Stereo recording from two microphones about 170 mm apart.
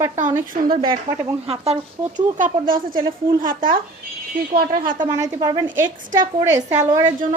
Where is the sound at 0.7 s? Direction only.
30° right (ahead or behind).